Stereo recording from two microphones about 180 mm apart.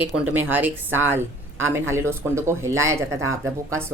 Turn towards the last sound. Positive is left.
turn(degrees=-15)  # may be behind; listen again after turning